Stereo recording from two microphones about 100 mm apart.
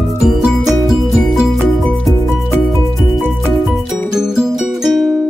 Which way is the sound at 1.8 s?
5° left (ahead or behind).